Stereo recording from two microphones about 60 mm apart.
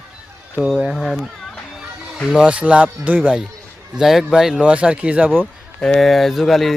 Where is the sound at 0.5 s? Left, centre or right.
Centre.